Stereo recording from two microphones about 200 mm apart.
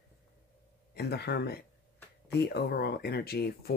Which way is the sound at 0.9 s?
55° left (ahead or behind).